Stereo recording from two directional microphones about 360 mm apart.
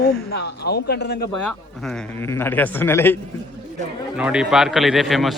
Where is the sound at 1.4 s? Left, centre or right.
Centre.